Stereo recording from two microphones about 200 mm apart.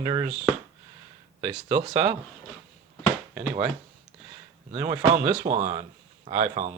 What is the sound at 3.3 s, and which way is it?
Speech, 5° right (ahead or behind).